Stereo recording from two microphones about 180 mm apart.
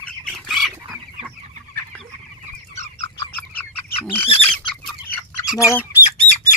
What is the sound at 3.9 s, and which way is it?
Bird, 35° left (ahead or behind).